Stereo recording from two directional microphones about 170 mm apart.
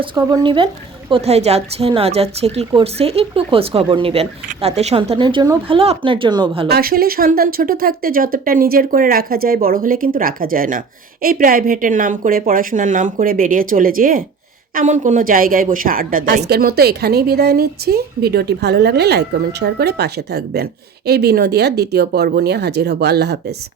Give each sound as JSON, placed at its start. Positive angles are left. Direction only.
{"t": 0.0, "sound": "speech", "side_deg": -25}
{"t": 6.7, "sound": "speech", "side_deg": -65}
{"t": 14.8, "sound": "a woman's voice", "side_deg": -45}